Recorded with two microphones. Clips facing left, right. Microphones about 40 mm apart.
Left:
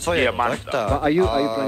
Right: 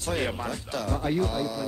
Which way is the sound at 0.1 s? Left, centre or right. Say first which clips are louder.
Left 10 dB; left.